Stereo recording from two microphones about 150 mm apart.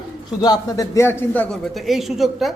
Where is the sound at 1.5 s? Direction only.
Centre (ahead or behind).